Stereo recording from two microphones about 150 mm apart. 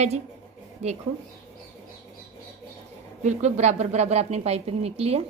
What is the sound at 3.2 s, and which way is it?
A woman's voice, 50° right (ahead or behind).